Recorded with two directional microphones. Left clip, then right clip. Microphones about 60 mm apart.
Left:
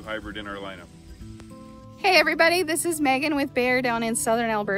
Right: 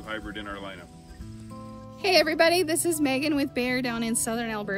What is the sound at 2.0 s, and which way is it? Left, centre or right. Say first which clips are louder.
Speech: left 2 dB; left.